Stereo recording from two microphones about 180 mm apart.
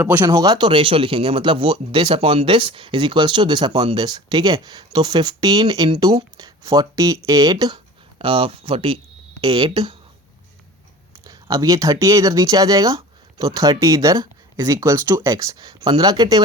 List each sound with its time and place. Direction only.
0.0 s speech: 10° right (ahead or behind)
0.3 s speech: 20° right (ahead or behind)
11.3 s speech: 20° right (ahead or behind)